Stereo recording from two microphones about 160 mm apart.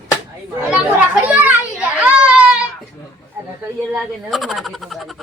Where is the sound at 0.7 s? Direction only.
5° right (ahead or behind).